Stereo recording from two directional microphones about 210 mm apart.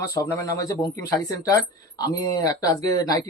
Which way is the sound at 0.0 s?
15° left (ahead or behind).